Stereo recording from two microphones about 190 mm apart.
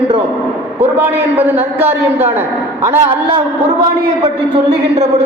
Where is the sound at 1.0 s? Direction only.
10° right (ahead or behind).